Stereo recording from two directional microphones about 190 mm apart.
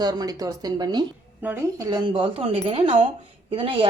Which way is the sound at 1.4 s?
10° right (ahead or behind).